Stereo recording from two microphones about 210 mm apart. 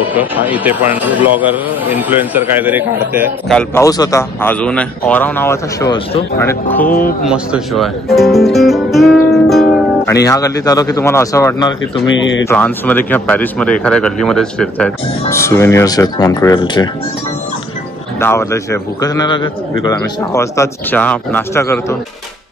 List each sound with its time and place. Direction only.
0.1 s a man's voice: 10° right (ahead or behind)
3.4 s speech: 5° left (ahead or behind)
3.8 s a man's voice: 15° left (ahead or behind)
6.3 s a man's voice: 10° left (ahead or behind)
7.2 s speech: 5° right (ahead or behind)
9.3 s music: centre (ahead or behind)
10.2 s a man's voice: 15° left (ahead or behind)
12.1 s speech: 65° left (ahead or behind)
12.4 s a man's voice: 5° left (ahead or behind)
18.2 s a man's voice: 15° left (ahead or behind)